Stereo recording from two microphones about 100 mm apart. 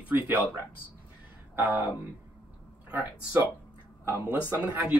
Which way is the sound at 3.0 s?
20° right (ahead or behind).